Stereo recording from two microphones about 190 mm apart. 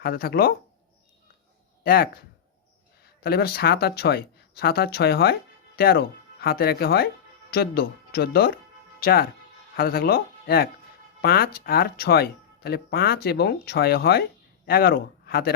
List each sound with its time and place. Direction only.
0.0 s speech: 50° left (ahead or behind)
1.8 s speech: 50° left (ahead or behind)